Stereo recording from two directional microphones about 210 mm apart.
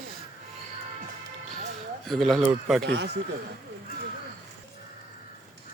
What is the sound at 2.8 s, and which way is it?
Speech, 55° right (ahead or behind).